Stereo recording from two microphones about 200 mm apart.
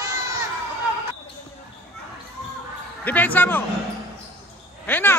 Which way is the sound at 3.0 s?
10° left (ahead or behind).